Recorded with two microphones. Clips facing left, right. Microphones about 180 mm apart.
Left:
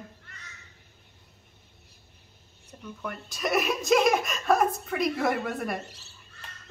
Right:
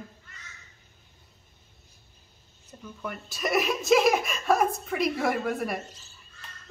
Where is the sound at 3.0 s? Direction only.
Centre (ahead or behind).